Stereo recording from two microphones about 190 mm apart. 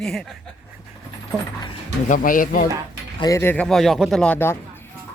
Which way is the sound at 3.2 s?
15° left (ahead or behind).